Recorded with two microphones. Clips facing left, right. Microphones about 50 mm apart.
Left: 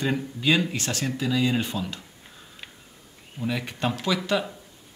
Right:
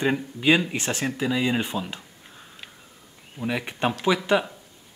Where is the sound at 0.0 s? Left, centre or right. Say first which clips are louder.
Right 3 dB; right.